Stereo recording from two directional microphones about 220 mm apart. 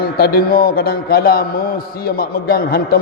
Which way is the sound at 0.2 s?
45° left (ahead or behind).